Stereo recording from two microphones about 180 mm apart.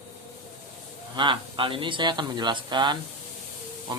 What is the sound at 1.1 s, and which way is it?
Speech, 25° right (ahead or behind).